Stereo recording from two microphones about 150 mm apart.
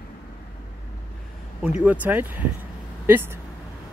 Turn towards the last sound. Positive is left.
turn(degrees=-15)  # may be behind; listen again after turning